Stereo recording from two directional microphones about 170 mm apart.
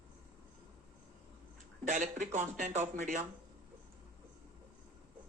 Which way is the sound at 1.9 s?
50° right (ahead or behind).